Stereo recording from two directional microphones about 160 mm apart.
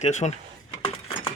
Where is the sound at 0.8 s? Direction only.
35° left (ahead or behind).